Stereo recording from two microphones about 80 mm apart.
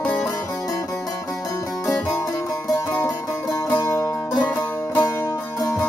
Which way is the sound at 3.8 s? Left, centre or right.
Left.